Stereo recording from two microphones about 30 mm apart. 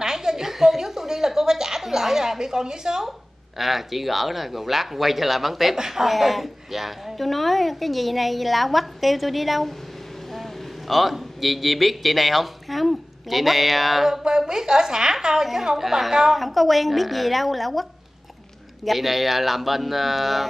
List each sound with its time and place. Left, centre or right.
0.0 s a sound: centre
3.5 s a woman's voice: centre
6.0 s a woman's voice: centre
14.5 s speech: right
15.6 s a woman's voice: centre
16.3 s a woman's voice: centre
18.9 s a woman's voice: centre